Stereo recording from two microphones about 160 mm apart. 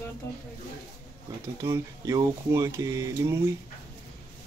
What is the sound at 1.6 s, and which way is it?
Speech, 20° right (ahead or behind).